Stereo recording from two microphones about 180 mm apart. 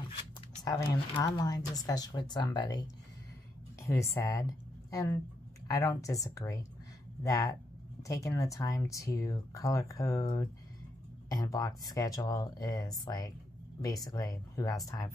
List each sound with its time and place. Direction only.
0.7 s speech: 20° left (ahead or behind)